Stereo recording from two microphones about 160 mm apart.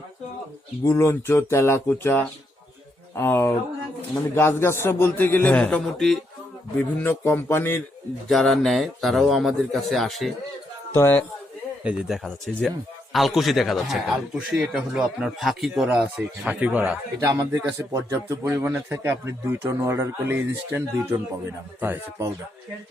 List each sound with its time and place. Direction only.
0.9 s a man's voice: 15° left (ahead or behind)
8.3 s speech: centre (ahead or behind)
10.9 s a man's voice: 10° left (ahead or behind)
11.8 s speech: 5° right (ahead or behind)
17.2 s a man's voice: 20° right (ahead or behind)